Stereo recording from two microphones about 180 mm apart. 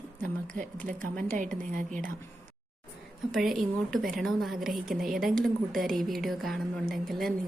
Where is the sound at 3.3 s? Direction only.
Centre (ahead or behind).